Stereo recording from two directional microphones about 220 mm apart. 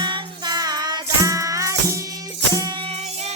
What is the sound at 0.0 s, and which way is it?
Music, 20° right (ahead or behind).